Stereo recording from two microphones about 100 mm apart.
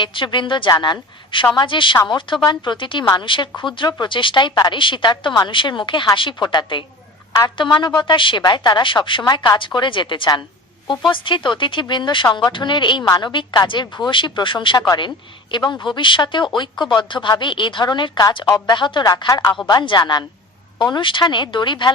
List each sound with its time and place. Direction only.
0.0 s a woman's voice: 55° left (ahead or behind)
19.3 s speech: 25° left (ahead or behind)
19.6 s speech: 50° left (ahead or behind)